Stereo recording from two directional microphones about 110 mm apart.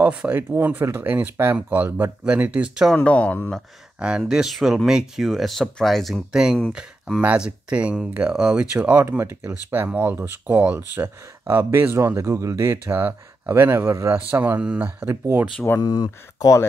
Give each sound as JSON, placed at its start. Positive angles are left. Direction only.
{"t": 0.0, "sound": "speech", "side_deg": -15}
{"t": 2.9, "sound": "speech", "side_deg": 10}
{"t": 4.2, "sound": "speech", "side_deg": -5}
{"t": 15.8, "sound": "speech", "side_deg": 40}